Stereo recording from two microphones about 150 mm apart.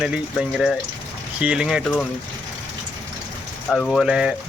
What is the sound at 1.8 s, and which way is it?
Speech, 5° left (ahead or behind).